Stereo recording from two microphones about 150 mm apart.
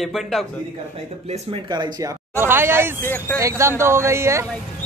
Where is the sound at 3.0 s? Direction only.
15° left (ahead or behind).